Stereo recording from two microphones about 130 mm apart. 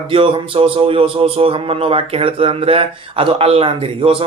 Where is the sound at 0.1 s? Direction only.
45° right (ahead or behind).